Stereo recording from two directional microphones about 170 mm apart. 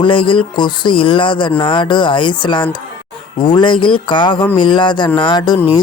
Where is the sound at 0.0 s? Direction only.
30° left (ahead or behind).